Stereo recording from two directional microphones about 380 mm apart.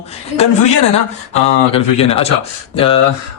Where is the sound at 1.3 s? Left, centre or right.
Centre.